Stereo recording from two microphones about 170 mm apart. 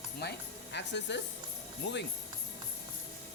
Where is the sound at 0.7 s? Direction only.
90° left.